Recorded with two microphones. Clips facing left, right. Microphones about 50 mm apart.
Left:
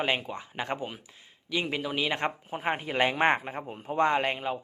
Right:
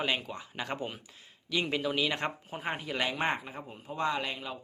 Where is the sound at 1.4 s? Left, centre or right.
Centre.